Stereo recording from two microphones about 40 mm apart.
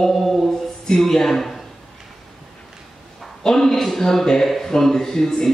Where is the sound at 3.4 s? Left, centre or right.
Centre.